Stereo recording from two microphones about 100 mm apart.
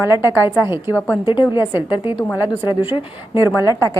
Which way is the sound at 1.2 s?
50° left (ahead or behind).